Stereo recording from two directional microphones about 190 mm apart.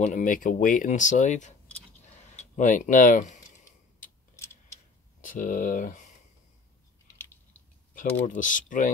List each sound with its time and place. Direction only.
0.0 s speech: 45° left (ahead or behind)
5.2 s speech: 45° left (ahead or behind)
7.9 s speech: 45° left (ahead or behind)